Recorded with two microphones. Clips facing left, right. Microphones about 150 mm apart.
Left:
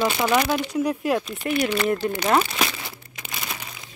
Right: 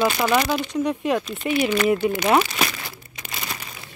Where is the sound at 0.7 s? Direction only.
5° left (ahead or behind).